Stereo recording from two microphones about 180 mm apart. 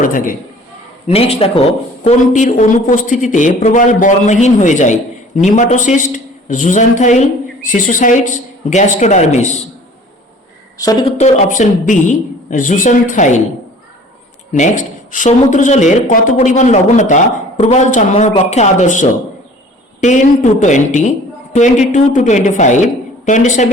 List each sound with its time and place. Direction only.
0.0 s speech: 50° left (ahead or behind)
1.0 s speech: 35° left (ahead or behind)
2.0 s speech: 45° left (ahead or behind)
10.8 s speech: 20° left (ahead or behind)
11.2 s speech: 40° left (ahead or behind)
14.5 s speech: 45° left (ahead or behind)